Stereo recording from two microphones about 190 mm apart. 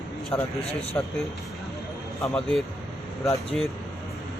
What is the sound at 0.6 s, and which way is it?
Speech, 35° left (ahead or behind).